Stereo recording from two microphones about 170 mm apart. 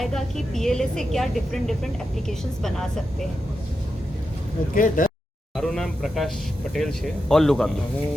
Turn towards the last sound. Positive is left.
turn(degrees=5)  # may be behind; listen again after turning